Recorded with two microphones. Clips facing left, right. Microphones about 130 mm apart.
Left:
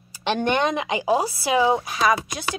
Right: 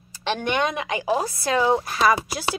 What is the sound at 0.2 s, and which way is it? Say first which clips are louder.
Speech: left 2 dB; 20° left (ahead or behind).